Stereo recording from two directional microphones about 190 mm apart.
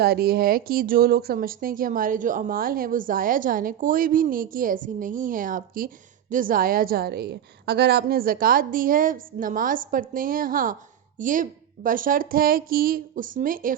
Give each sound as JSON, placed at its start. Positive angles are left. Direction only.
{"t": 0.0, "sound": "speech", "side_deg": -55}